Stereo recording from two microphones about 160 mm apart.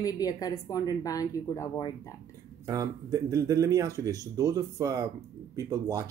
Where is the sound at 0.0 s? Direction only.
25° left (ahead or behind).